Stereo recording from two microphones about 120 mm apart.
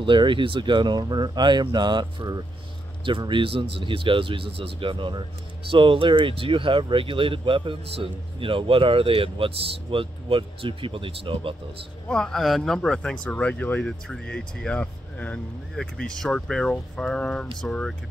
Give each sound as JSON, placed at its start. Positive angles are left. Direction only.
{"t": 0.0, "sound": "speech", "side_deg": -45}
{"t": 12.1, "sound": "speech", "side_deg": 5}